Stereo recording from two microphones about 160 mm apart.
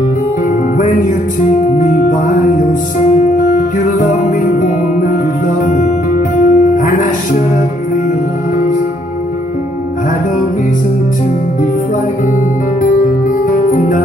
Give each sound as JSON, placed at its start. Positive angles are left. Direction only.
{"t": 1.8, "sound": "music", "side_deg": 55}
{"t": 6.3, "sound": "music", "side_deg": 55}
{"t": 13.5, "sound": "music", "side_deg": 55}